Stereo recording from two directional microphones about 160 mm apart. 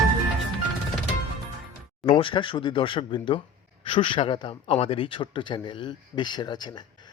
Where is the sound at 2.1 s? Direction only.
35° left (ahead or behind).